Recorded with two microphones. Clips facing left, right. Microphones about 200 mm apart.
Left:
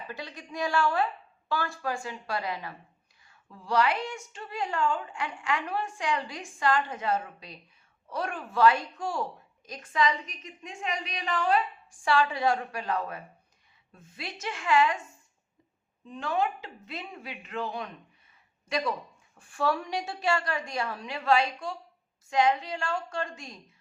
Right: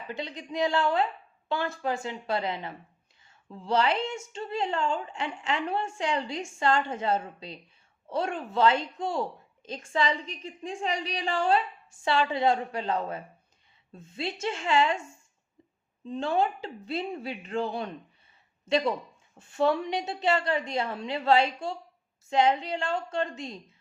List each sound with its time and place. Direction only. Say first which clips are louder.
0.2 s a woman's voice: right 5 dB; 20° right (ahead or behind)
16.0 s a woman's voice: right 3 dB; 30° right (ahead or behind)